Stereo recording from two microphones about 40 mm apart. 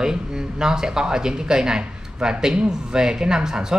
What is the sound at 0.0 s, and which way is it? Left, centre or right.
A man's voice, centre.